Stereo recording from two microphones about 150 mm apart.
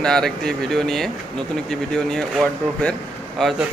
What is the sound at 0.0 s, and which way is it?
Speech, 5° left (ahead or behind).